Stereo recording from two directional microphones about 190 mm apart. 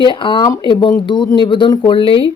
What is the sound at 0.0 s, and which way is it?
Speech, 25° left (ahead or behind).